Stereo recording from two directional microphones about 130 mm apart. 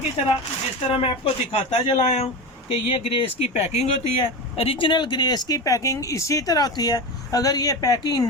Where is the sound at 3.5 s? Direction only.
55° left (ahead or behind).